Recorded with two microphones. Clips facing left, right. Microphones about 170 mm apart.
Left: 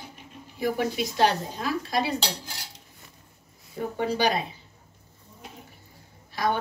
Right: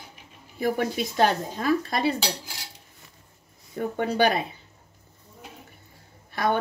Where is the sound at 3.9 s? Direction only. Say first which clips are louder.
Right 2 dB; 55° right (ahead or behind).